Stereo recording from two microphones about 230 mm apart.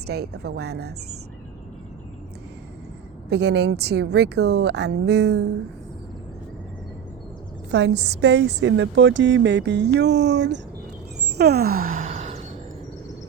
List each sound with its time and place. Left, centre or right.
0.1 s a woman's voice: right
3.2 s a woman's voice: right
7.7 s a woman's voice: right
11.3 s sigh: right